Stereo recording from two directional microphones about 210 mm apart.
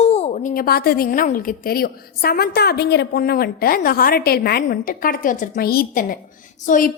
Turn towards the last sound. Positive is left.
turn(degrees=40)  # may be behind; listen again after turning